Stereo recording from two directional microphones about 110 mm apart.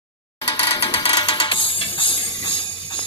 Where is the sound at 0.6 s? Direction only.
55° left (ahead or behind).